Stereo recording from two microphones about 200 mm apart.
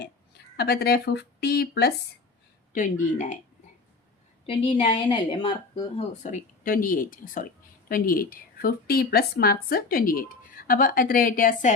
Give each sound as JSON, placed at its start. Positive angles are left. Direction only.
{"t": 0.5, "sound": "a woman's voice", "side_deg": 50}
{"t": 2.7, "sound": "speech", "side_deg": 40}
{"t": 4.4, "sound": "speech", "side_deg": 25}
{"t": 6.2, "sound": "a woman's voice", "side_deg": 40}